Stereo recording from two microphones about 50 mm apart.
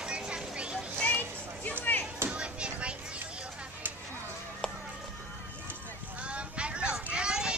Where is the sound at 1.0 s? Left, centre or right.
Left.